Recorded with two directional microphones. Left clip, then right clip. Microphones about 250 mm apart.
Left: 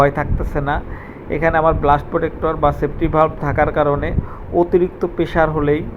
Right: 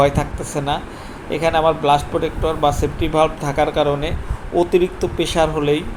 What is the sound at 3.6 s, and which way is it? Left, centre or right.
Speech, centre.